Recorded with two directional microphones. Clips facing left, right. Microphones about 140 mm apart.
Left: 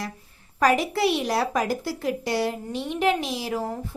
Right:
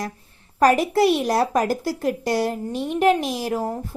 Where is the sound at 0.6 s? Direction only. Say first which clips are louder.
Right 4 dB; 45° right (ahead or behind).